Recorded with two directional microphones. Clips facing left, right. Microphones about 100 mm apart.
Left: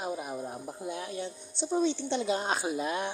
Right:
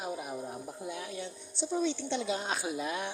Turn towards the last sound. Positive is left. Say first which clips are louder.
# left 3 dB
turn(degrees=40)  # may be behind; listen again after turning